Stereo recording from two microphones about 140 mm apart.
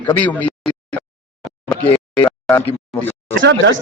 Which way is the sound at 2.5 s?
15° left (ahead or behind).